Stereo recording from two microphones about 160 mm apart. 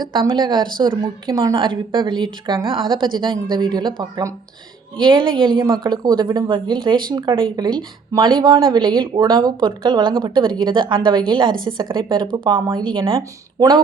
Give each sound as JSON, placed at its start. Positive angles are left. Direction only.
{"t": 0.0, "sound": "a woman's voice", "side_deg": -30}